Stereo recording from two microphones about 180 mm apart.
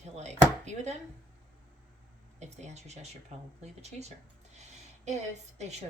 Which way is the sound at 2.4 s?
40° right (ahead or behind).